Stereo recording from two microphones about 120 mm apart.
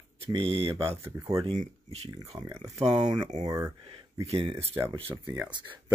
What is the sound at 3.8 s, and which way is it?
Speech, 50° right (ahead or behind).